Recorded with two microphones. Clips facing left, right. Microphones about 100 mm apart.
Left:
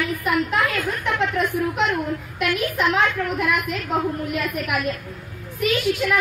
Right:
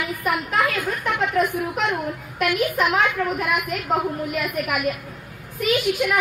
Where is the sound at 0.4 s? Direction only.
15° right (ahead or behind).